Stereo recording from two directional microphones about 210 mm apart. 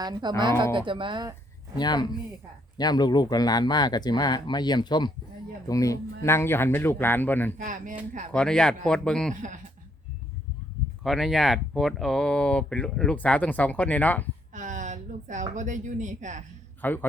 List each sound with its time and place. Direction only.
0.0 s speech: 20° right (ahead or behind)
1.7 s speech: 20° left (ahead or behind)
7.6 s speech: 40° right (ahead or behind)
8.3 s speech: 5° left (ahead or behind)
9.3 s speech: 35° right (ahead or behind)
11.0 s speech: centre (ahead or behind)
14.5 s a woman's voice: 35° right (ahead or behind)
16.8 s speech: 10° left (ahead or behind)